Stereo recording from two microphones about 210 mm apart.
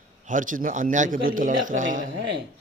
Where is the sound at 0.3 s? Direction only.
40° right (ahead or behind).